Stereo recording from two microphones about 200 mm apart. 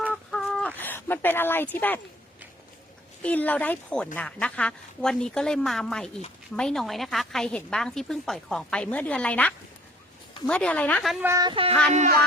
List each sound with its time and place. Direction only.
0.1 s a sound: centre (ahead or behind)
0.8 s speech: 10° left (ahead or behind)
3.2 s a woman's voice: 10° left (ahead or behind)
11.3 s speech: 20° right (ahead or behind)